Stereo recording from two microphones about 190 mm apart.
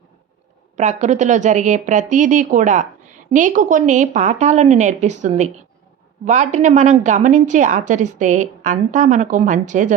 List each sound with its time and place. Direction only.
0.8 s speech: 40° right (ahead or behind)